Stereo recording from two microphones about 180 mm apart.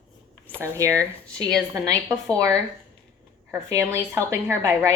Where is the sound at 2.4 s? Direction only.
15° right (ahead or behind).